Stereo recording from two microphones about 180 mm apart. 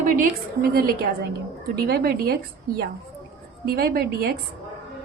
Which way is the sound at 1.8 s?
60° right (ahead or behind).